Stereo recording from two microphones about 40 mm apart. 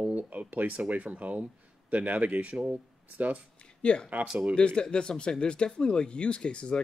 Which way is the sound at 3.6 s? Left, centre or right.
Left.